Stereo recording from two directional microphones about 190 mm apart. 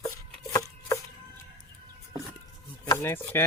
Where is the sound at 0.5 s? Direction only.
15° left (ahead or behind).